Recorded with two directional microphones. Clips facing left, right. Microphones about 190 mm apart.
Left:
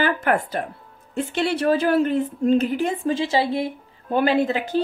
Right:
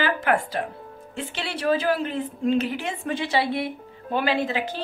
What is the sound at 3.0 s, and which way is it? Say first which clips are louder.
Speech: left 4 dB; 30° left (ahead or behind).